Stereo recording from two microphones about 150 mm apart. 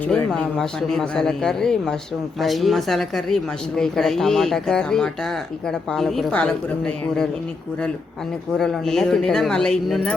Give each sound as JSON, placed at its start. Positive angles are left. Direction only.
{"t": 0.0, "sound": "a woman's voice", "side_deg": 5}
{"t": 8.5, "sound": "a woman's voice", "side_deg": 0}